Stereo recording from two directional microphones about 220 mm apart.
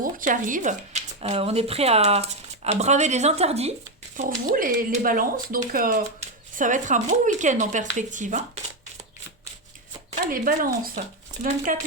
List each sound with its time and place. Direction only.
0.0 s speech: 35° right (ahead or behind)
10.3 s speech: 40° right (ahead or behind)